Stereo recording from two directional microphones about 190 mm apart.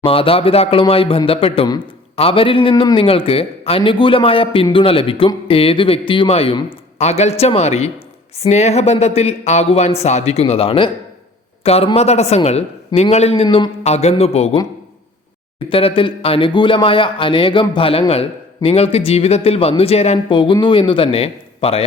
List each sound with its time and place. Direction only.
0.0 s speech: 30° left (ahead or behind)
15.7 s speech: 30° left (ahead or behind)